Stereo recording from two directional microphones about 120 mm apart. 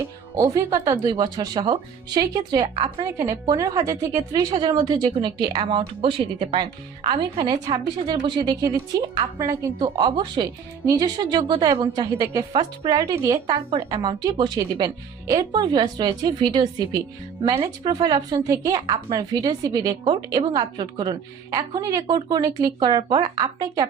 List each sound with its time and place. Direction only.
0.3 s a woman's voice: 30° right (ahead or behind)
3.0 s a woman's voice: 25° right (ahead or behind); by 7.3 s 45° right (ahead or behind)
7.3 s a woman's voice: 35° right (ahead or behind)
9.4 s speech: 25° right (ahead or behind)
9.8 s a woman's voice: 45° right (ahead or behind)
11.7 s speech: 30° right (ahead or behind)
12.5 s speech: 45° right (ahead or behind)
13.0 s a woman's voice: 30° right (ahead or behind)
21.8 s a woman's voice: 30° right (ahead or behind)